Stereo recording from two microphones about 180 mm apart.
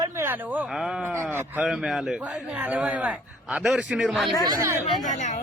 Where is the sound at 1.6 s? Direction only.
Centre (ahead or behind).